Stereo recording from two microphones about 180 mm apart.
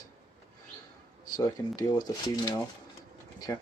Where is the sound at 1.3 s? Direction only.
20° left (ahead or behind).